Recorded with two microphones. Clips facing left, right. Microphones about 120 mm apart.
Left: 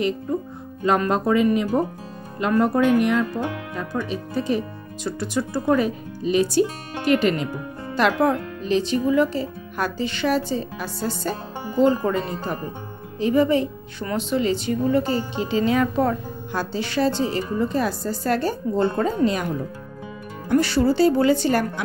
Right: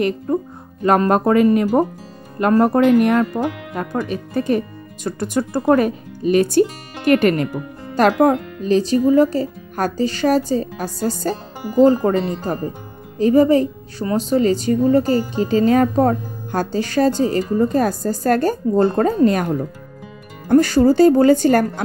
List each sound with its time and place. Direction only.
0.3 s music: 50° right (ahead or behind)
0.8 s speech: 50° right (ahead or behind)
7.9 s a woman's voice: 45° right (ahead or behind)